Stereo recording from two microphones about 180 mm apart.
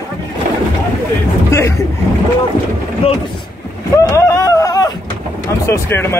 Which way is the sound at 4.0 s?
15° left (ahead or behind).